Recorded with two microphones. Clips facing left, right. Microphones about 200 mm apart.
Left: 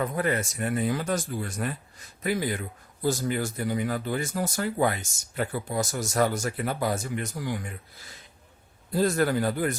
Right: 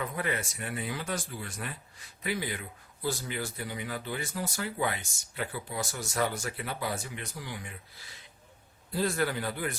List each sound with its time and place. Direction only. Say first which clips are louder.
0.0 s speech: left 6 dB; 45° left (ahead or behind)